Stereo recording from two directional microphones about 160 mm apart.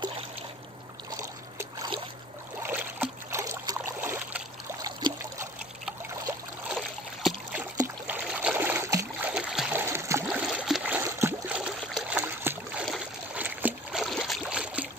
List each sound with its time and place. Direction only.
1.6 s trickle: 25° right (ahead or behind)
2.6 s boat: 10° right (ahead or behind)
4.8 s a sound: 20° right (ahead or behind)
7.2 s a sound: centre (ahead or behind)
7.7 s boat: 15° right (ahead or behind)
9.3 s a sound: 5° right (ahead or behind)
11.1 s boat: 20° right (ahead or behind)
12.8 s trickle: 5° right (ahead or behind)
14.0 s boat: centre (ahead or behind)